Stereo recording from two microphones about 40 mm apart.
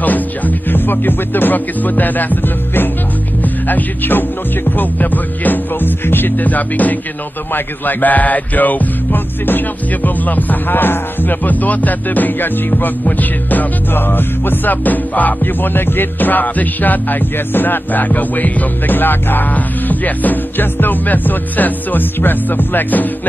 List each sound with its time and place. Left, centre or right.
0.0 s speech: left
3.4 s music: left
13.9 s music: left